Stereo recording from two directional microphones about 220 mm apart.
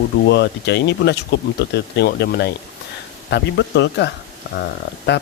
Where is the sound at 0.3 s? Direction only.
50° left (ahead or behind).